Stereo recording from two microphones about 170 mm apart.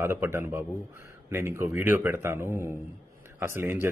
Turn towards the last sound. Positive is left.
turn(degrees=-15)  # may be behind; listen again after turning